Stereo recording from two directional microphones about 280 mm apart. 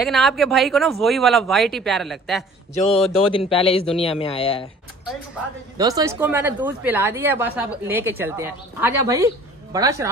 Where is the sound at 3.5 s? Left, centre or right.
Centre.